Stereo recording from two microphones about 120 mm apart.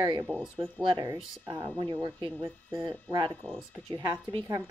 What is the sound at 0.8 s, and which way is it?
A woman's voice, 35° right (ahead or behind).